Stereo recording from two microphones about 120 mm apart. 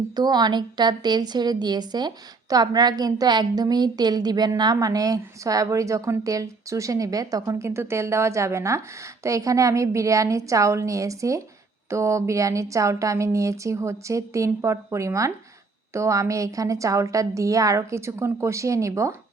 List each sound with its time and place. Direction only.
0.2 s a woman's voice: 35° right (ahead or behind)